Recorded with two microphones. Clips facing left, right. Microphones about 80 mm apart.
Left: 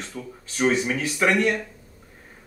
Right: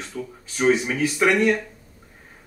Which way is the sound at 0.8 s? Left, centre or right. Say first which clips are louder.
Right 2 dB; right.